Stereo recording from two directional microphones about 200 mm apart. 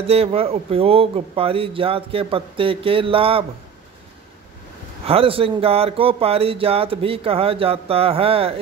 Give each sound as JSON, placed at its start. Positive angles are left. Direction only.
{"t": 0.0, "sound": "speech", "side_deg": -30}
{"t": 5.0, "sound": "speech", "side_deg": -30}